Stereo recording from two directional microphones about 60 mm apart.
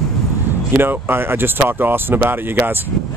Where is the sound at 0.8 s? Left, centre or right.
Right.